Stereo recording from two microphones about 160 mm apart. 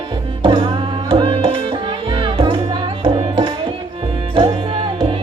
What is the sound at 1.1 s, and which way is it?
Tabla, 30° right (ahead or behind).